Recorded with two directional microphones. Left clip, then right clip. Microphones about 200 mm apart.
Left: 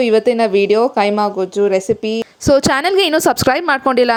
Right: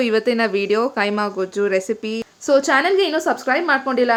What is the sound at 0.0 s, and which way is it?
Speech, 20° left (ahead or behind).